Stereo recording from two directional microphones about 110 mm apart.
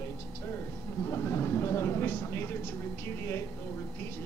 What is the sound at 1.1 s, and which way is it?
Speech, 25° left (ahead or behind).